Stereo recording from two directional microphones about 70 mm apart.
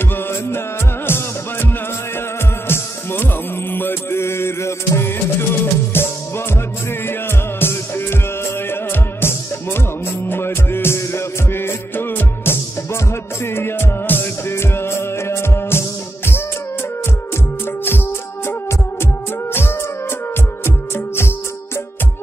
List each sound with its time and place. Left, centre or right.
0.1 s music: left
2.7 s music: left
17.8 s music: left